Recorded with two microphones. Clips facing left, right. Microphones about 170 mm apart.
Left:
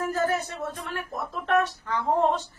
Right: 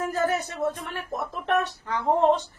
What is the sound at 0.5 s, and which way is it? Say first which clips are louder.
A woman's voice: right 4 dB; 20° right (ahead or behind).